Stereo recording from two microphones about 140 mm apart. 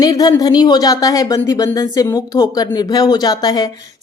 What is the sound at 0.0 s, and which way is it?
A woman's voice, 25° left (ahead or behind).